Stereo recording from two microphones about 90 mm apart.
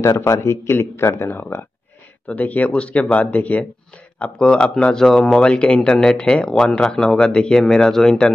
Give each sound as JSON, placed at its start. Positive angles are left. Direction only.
{"t": 0.0, "sound": "speech", "side_deg": 35}